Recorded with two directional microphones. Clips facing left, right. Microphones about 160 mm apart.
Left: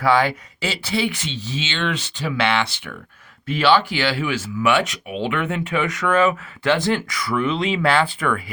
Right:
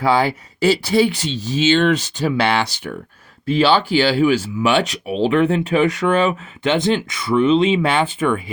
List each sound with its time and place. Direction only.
0.0 s speech: 30° right (ahead or behind)